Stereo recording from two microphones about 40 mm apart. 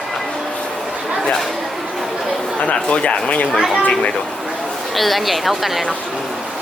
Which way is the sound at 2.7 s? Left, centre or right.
Left.